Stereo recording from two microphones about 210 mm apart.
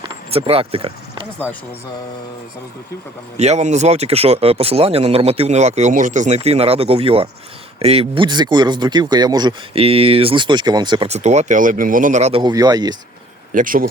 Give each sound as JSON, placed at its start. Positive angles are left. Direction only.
{"t": 0.0, "sound": "speech", "side_deg": -25}
{"t": 3.3, "sound": "speech", "side_deg": -30}
{"t": 13.5, "sound": "speech", "side_deg": -40}